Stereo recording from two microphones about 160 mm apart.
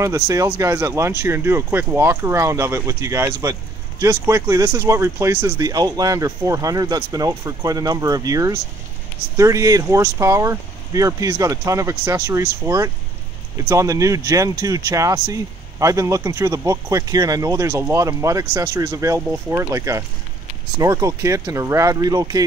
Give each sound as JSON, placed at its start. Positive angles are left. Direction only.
{"t": 0.0, "sound": "speech", "side_deg": -20}